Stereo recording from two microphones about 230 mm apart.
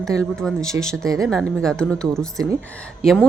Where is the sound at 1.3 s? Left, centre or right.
Centre.